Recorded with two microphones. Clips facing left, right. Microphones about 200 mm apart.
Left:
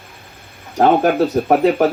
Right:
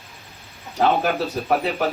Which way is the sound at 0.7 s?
50° left (ahead or behind).